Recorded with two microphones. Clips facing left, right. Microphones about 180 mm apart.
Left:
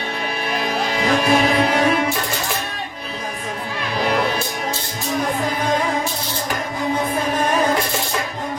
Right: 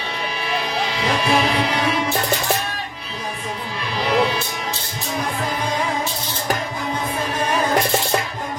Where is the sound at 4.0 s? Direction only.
50° left (ahead or behind).